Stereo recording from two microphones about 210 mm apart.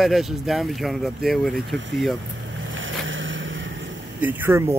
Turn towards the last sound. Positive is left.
turn(degrees=-10)  # may be behind; listen again after turning